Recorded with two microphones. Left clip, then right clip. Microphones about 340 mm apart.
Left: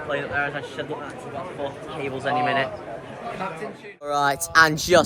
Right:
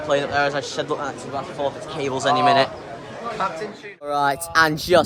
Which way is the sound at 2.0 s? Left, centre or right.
Centre.